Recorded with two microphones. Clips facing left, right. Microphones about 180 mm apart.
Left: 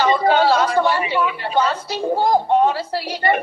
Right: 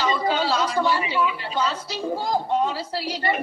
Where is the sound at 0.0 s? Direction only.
60° left (ahead or behind).